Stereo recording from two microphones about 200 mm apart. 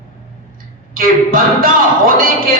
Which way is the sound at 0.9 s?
45° right (ahead or behind).